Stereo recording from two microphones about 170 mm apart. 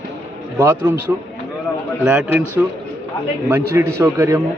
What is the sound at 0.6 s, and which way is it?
A man's voice, 15° right (ahead or behind).